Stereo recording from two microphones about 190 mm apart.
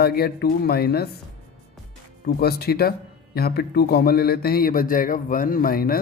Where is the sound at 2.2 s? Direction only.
55° left (ahead or behind).